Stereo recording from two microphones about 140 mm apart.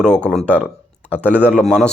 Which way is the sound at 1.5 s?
5° left (ahead or behind).